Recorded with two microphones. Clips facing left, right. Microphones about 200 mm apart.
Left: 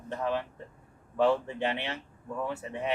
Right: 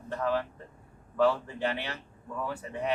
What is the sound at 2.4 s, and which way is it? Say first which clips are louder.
Speech: right 1 dB; 25° left (ahead or behind).